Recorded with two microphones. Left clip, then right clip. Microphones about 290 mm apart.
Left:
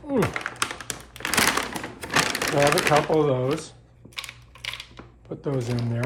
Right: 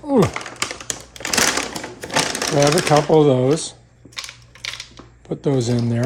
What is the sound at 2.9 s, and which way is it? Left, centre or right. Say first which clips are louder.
Speech: right 6 dB; centre.